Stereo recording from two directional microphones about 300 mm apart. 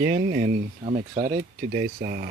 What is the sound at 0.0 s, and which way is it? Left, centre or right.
Speech, right.